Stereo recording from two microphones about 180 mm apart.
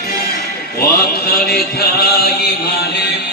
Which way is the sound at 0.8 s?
60° left (ahead or behind).